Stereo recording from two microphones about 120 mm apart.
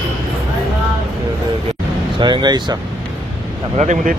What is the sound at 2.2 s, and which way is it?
Speech, 40° right (ahead or behind).